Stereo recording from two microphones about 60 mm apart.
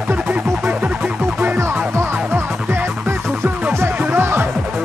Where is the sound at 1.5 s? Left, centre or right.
Right.